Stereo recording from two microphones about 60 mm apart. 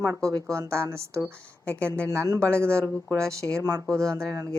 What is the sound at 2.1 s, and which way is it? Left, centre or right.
Speech, right.